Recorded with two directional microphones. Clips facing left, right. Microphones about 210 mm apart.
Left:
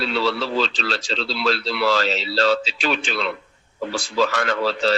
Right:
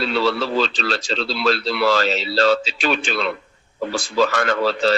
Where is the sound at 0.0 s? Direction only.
50° right (ahead or behind).